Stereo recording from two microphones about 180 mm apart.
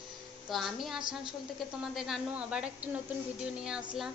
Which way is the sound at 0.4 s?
Centre (ahead or behind).